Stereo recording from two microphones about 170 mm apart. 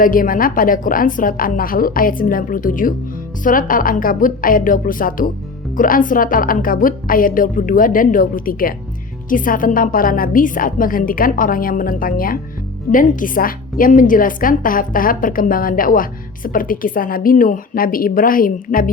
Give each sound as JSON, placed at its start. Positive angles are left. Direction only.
{"t": 0.0, "sound": "a woman's voice", "side_deg": 55}